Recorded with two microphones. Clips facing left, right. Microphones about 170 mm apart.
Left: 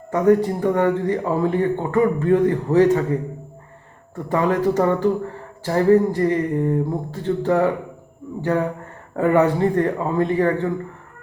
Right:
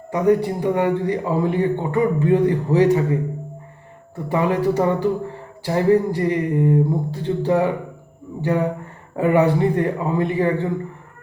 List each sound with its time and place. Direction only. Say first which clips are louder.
0.1 s a man's voice: left 1 dB; 15° right (ahead or behind)
4.3 s a man's voice: even; 15° right (ahead or behind)